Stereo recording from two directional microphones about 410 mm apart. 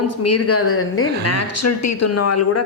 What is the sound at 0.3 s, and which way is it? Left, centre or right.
A woman's voice, left.